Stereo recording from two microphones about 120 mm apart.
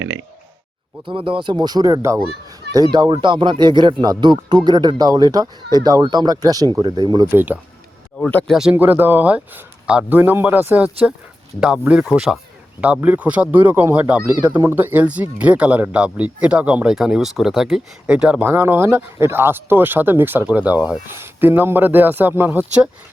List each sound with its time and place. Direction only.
1.0 s speech: 45° right (ahead or behind); by 2.1 s 25° right (ahead or behind)
2.9 s speech: 40° right (ahead or behind)
7.3 s speech: 15° right (ahead or behind)
8.4 s speech: 5° right (ahead or behind)
8.7 s speech: 15° right (ahead or behind)